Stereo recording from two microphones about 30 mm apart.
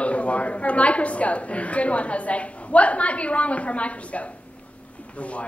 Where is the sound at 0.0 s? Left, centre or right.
Left.